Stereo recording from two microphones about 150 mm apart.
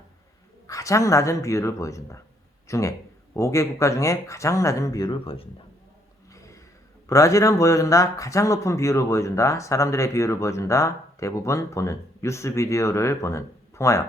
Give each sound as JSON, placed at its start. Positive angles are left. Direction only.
{"t": 0.7, "sound": "speech", "side_deg": 20}
{"t": 6.3, "sound": "a sound", "side_deg": 20}
{"t": 7.1, "sound": "speech", "side_deg": 20}